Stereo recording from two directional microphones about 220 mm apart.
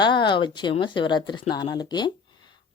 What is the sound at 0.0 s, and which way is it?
Speech, 20° left (ahead or behind).